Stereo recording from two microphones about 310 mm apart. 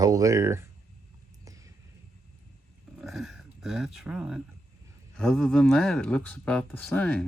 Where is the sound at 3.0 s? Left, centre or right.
Centre.